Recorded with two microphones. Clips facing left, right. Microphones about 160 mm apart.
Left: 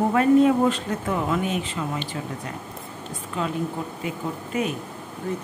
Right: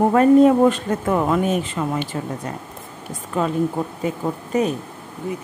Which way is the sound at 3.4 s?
45° right (ahead or behind).